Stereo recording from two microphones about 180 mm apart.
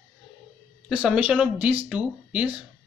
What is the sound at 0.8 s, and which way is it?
Speech, 5° right (ahead or behind).